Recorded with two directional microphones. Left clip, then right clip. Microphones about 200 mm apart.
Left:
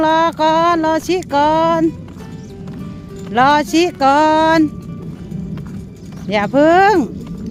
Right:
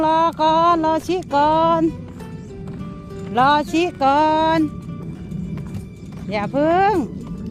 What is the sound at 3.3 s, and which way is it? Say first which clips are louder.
Speech: left 4 dB; 10° left (ahead or behind).